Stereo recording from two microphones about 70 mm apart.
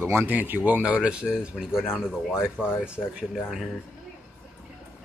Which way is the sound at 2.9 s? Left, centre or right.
Centre.